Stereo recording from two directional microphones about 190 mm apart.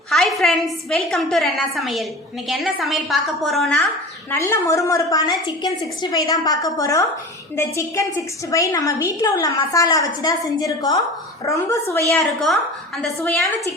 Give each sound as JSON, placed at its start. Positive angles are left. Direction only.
{"t": 0.1, "sound": "a woman's voice", "side_deg": 0}
{"t": 4.3, "sound": "a woman's voice", "side_deg": 15}
{"t": 12.1, "sound": "a woman's voice", "side_deg": 0}